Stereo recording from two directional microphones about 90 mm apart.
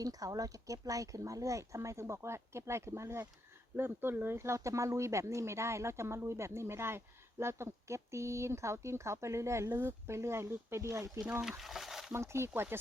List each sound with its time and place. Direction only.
0.0 s speech: 40° right (ahead or behind)
11.2 s speech: 15° right (ahead or behind)
11.4 s a sound: 5° right (ahead or behind)
12.1 s speech: 30° right (ahead or behind)